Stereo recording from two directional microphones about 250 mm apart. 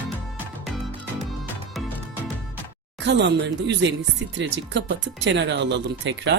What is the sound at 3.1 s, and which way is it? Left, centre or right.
Speech, right.